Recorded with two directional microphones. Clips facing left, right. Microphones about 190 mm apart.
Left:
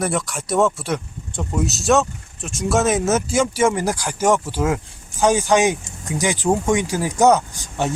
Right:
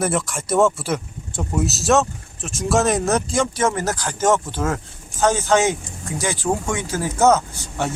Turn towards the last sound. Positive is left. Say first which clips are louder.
# left 2 dB
turn(degrees=15)  # may be behind; listen again after turning